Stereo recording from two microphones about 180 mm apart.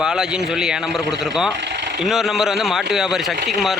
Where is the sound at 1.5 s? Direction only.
70° right (ahead or behind).